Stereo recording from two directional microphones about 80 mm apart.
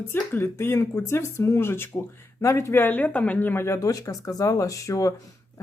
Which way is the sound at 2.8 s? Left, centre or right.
Left.